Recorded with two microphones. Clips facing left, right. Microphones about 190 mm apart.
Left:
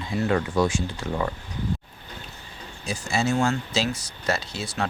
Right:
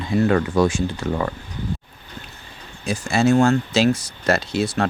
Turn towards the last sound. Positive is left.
turn(degrees=-80)